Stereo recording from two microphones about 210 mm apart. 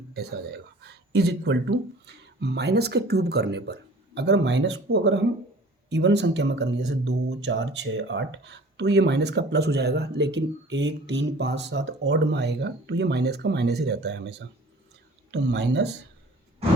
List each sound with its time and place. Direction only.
0.1 s speech: 50° right (ahead or behind)